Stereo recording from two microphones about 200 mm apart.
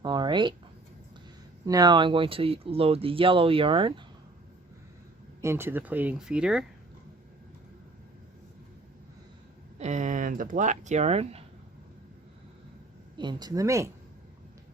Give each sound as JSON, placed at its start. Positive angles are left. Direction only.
{"t": 0.0, "sound": "a sound", "side_deg": -20}
{"t": 1.6, "sound": "speech", "side_deg": -20}
{"t": 5.4, "sound": "speech", "side_deg": -10}
{"t": 9.7, "sound": "speech", "side_deg": -35}
{"t": 13.1, "sound": "speech", "side_deg": -20}